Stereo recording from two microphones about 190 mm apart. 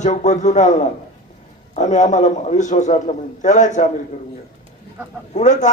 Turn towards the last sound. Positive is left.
turn(degrees=40)  # may be behind; listen again after turning